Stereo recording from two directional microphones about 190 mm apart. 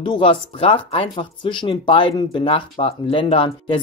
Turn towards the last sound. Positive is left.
turn(degrees=30)  # may be behind; listen again after turning